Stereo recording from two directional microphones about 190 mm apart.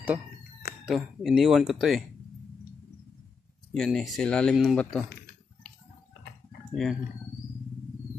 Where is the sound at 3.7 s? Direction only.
Centre (ahead or behind).